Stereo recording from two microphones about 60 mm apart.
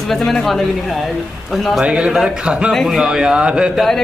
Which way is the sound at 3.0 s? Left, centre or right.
Centre.